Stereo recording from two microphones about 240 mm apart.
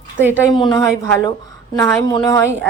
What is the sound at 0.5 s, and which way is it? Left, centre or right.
Speech, centre.